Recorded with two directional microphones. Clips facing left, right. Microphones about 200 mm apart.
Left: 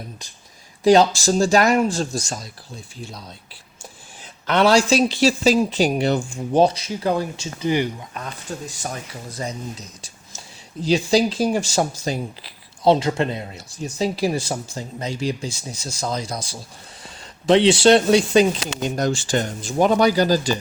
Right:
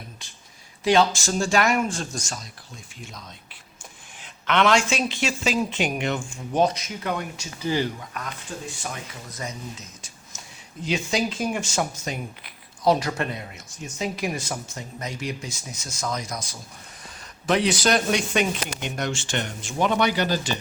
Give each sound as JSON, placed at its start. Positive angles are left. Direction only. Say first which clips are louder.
{"t": 0.9, "sound": "speech", "louder": "left 6 dB", "side_deg": 35}
{"t": 4.4, "sound": "speech", "louder": "left 4 dB", "side_deg": 35}
{"t": 7.6, "sound": "speech", "louder": "left 4 dB", "side_deg": 15}
{"t": 8.8, "sound": "speech", "louder": "left 4 dB", "side_deg": 35}